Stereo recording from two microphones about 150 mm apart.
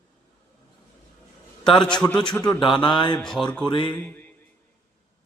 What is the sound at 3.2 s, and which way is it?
A man's voice, 5° left (ahead or behind).